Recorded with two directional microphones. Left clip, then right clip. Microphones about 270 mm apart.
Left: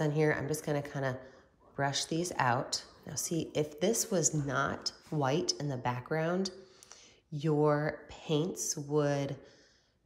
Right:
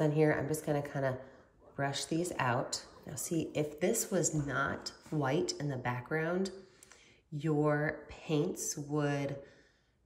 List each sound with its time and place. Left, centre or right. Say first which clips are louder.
0.0 s speech: right 1 dB; centre